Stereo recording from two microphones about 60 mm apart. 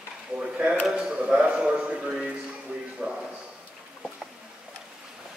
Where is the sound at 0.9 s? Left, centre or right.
Centre.